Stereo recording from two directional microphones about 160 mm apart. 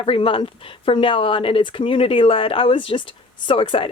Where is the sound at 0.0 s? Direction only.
35° left (ahead or behind).